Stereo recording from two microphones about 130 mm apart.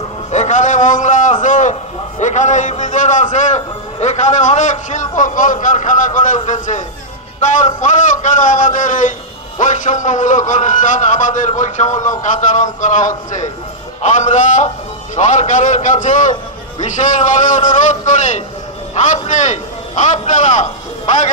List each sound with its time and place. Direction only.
0.3 s a man's voice: 65° left (ahead or behind)